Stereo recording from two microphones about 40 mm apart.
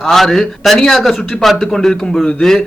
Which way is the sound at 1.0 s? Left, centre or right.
Centre.